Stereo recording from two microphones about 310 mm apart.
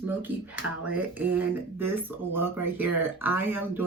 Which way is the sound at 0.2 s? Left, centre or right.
Centre.